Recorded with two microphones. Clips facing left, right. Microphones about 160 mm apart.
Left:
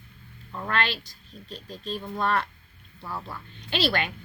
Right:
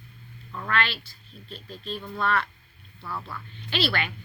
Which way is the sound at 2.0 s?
20° left (ahead or behind).